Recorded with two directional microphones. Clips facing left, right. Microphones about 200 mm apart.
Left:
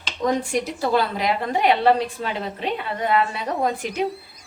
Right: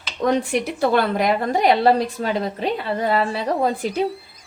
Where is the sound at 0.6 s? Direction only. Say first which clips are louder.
Right 3 dB; 60° right (ahead or behind).